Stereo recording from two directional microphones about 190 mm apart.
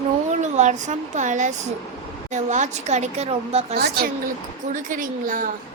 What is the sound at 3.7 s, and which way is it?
Speech, 55° right (ahead or behind).